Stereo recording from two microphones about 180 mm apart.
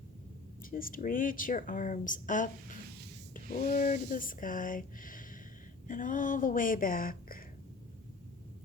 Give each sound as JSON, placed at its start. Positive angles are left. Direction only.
{"t": 0.6, "sound": "speech", "side_deg": 50}